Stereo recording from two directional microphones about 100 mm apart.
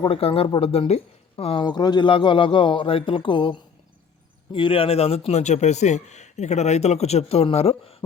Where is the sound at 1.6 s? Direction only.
45° left (ahead or behind); by 5.3 s 90° left.